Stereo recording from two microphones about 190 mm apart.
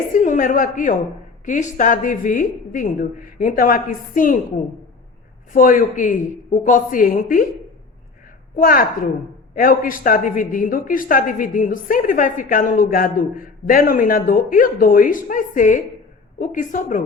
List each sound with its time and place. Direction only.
0.1 s a woman's voice: 45° left (ahead or behind)
5.5 s a woman's voice: 45° left (ahead or behind)
8.5 s a woman's voice: 45° left (ahead or behind)